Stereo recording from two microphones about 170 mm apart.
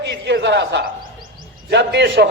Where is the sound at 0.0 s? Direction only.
90° right.